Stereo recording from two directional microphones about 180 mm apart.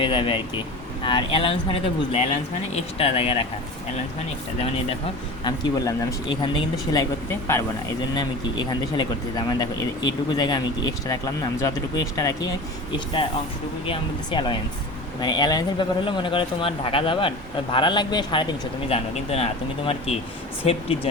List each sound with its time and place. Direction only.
0.0 s speech: 30° left (ahead or behind)
5.4 s speech: 20° left (ahead or behind)
11.6 s speech: 20° left (ahead or behind)